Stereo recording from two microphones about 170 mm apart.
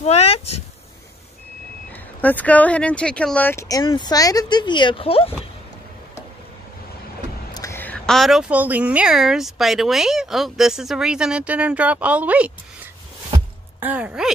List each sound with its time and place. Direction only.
0.0 s speech: 40° left (ahead or behind)
2.2 s speech: 10° left (ahead or behind); by 5.5 s 35° left (ahead or behind)
7.5 s a woman's voice: 15° left (ahead or behind); by 12.5 s 10° right (ahead or behind)
13.7 s speech: 10° right (ahead or behind)